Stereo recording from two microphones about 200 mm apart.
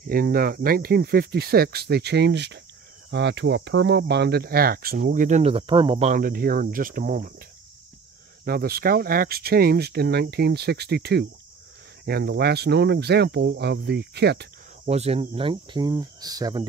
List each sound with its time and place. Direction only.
0.0 s speech: 45° right (ahead or behind)
8.5 s speech: 50° right (ahead or behind)
14.9 s speech: 30° right (ahead or behind)